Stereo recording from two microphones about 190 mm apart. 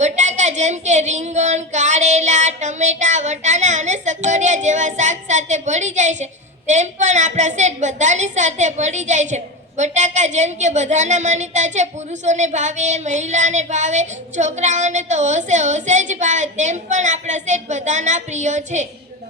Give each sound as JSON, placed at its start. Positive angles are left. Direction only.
{"t": 0.0, "sound": "child singing", "side_deg": -40}
{"t": 6.7, "sound": "a woman's voice", "side_deg": -40}